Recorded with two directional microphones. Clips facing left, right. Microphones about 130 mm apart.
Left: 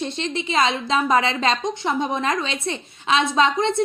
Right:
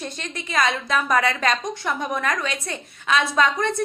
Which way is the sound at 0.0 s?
25° left (ahead or behind).